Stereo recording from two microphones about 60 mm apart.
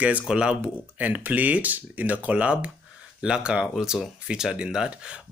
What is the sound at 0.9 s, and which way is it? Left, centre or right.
Speech, right.